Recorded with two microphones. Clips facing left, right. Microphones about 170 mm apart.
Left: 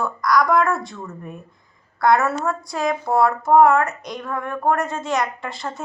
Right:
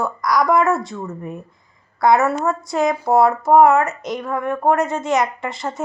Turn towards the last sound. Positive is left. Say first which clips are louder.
# right 4 dB
turn(degrees=-20)  # may be behind; listen again after turning